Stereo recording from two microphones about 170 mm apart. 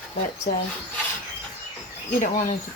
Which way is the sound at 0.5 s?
50° left (ahead or behind).